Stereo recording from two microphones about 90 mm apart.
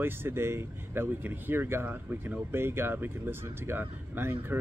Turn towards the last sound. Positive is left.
turn(degrees=-25)  # may be behind; listen again after turning